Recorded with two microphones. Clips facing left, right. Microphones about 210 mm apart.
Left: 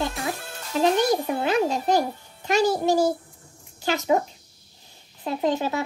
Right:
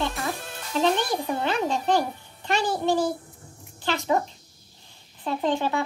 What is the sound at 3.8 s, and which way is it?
Speech, 10° left (ahead or behind).